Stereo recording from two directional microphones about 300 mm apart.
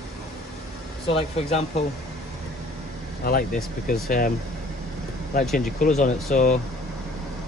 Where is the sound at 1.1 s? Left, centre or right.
Left.